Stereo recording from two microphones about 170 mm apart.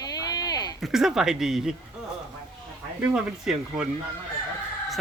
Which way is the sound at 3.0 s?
5° right (ahead or behind).